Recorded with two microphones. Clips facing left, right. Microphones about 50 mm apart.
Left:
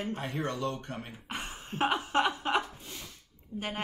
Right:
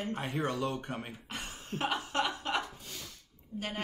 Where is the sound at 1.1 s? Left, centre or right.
Left.